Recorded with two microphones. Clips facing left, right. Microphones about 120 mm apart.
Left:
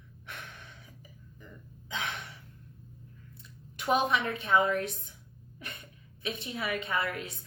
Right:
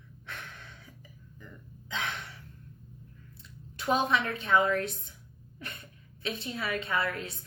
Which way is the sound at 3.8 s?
30° right (ahead or behind).